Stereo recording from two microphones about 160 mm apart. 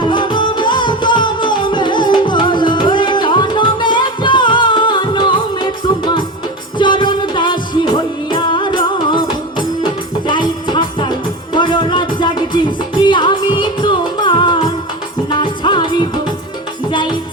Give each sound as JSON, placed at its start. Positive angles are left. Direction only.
{"t": 0.0, "sound": "music", "side_deg": 30}